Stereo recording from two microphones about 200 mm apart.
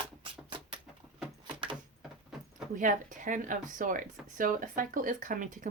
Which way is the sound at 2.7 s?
40° right (ahead or behind).